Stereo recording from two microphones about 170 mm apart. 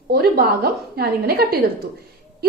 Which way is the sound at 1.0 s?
65° right (ahead or behind).